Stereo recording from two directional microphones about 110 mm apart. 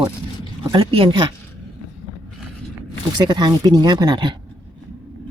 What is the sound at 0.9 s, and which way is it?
Speech, 45° right (ahead or behind).